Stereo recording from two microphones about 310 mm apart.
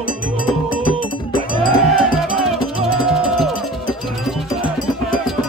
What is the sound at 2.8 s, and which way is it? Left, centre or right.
Music, centre.